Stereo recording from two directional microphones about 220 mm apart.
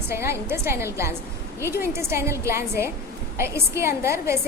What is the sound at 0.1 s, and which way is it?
A woman's voice, 10° right (ahead or behind).